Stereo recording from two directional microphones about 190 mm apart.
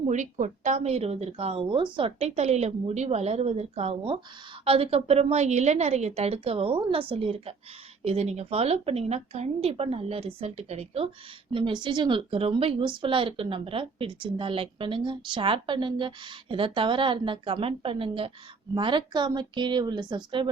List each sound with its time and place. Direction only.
0.1 s speech: 40° right (ahead or behind); by 20.5 s 25° right (ahead or behind)